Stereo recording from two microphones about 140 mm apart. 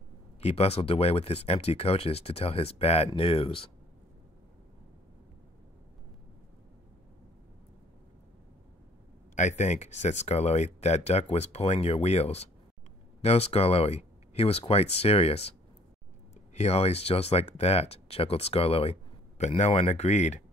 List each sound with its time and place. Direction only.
0.4 s speech: 45° left (ahead or behind)
9.3 s speech: 60° left (ahead or behind)
16.5 s speech: 50° left (ahead or behind)